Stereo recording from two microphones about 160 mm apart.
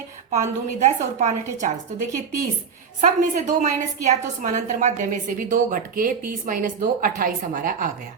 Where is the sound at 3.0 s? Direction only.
50° right (ahead or behind).